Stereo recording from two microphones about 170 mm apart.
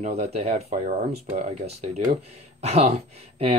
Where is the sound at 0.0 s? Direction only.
40° right (ahead or behind).